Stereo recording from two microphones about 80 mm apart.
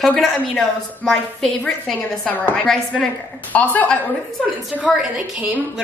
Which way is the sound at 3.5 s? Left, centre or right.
Centre.